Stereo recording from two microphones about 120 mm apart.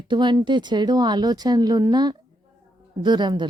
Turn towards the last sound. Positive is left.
turn(degrees=-40)  # may be behind; listen again after turning